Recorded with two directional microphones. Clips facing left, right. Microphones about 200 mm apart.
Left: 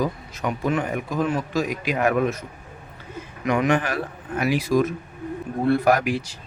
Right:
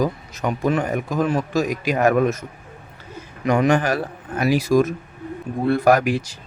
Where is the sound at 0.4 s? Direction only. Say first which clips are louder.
Right 3 dB; 40° right (ahead or behind).